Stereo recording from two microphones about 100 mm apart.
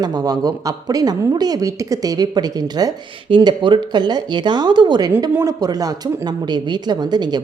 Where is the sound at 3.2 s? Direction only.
55° right (ahead or behind).